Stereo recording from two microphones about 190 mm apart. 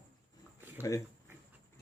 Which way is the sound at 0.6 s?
10° right (ahead or behind).